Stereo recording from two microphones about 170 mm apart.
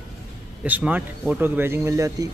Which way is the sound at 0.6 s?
10° right (ahead or behind).